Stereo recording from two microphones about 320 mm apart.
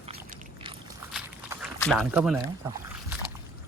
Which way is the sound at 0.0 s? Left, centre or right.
Centre.